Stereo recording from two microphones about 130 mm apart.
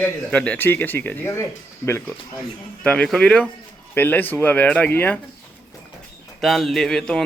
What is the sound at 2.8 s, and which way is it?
A man's voice, 10° left (ahead or behind).